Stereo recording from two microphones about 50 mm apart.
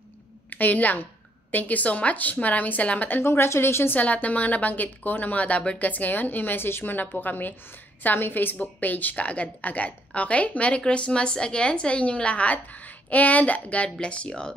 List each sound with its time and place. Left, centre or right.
0.5 s a woman's voice: left
3.2 s speech: left
3.9 s a woman's voice: left